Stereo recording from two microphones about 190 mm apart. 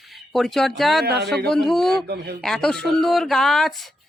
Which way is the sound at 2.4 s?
Centre (ahead or behind).